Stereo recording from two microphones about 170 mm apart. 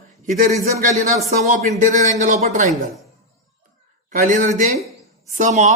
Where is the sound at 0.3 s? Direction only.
55° right (ahead or behind).